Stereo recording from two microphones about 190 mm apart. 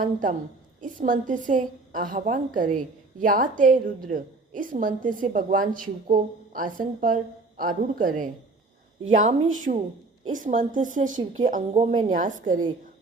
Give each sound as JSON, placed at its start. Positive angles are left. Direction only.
{"t": 0.0, "sound": "a woman's voice", "side_deg": -45}
{"t": 9.7, "sound": "a woman's voice", "side_deg": -40}